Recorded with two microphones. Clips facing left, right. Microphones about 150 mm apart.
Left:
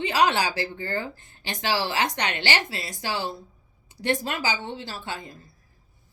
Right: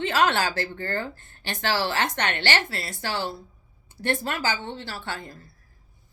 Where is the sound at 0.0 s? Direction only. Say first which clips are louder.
Even; 15° left (ahead or behind).